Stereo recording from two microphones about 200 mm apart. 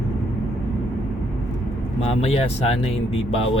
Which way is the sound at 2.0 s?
30° left (ahead or behind).